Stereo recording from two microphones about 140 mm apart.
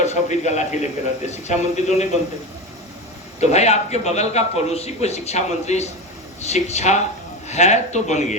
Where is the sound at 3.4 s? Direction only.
50° left (ahead or behind).